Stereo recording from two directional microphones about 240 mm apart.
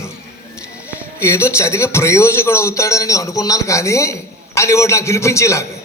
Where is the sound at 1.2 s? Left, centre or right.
Centre.